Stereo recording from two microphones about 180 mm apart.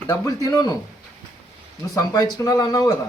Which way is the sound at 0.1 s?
20° left (ahead or behind).